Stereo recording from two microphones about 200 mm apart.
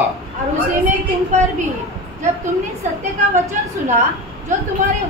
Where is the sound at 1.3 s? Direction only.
35° right (ahead or behind).